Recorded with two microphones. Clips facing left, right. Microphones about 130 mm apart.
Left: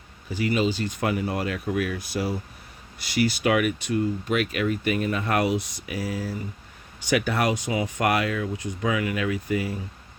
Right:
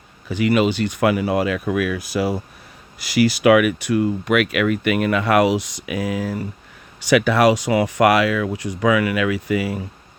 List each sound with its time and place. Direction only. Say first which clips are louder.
0.3 s speech: right 6 dB; 80° right